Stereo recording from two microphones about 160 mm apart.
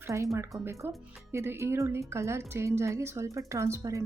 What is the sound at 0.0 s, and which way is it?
A woman's voice, 20° right (ahead or behind).